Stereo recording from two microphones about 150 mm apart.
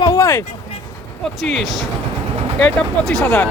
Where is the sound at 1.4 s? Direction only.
Centre (ahead or behind).